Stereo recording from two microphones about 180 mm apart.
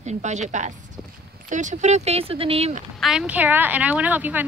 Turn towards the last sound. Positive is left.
turn(degrees=-10)  # may be behind; listen again after turning